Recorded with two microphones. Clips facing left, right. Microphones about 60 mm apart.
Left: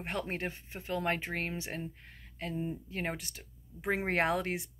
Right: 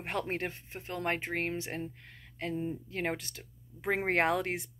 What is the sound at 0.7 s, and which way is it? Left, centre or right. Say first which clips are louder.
Speech: left 2 dB; right.